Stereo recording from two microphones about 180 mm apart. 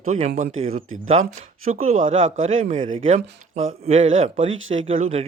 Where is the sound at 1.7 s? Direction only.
45° right (ahead or behind).